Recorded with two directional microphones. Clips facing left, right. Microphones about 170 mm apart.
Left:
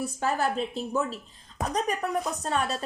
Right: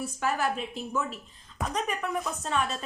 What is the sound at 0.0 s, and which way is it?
A woman's voice, 35° left (ahead or behind).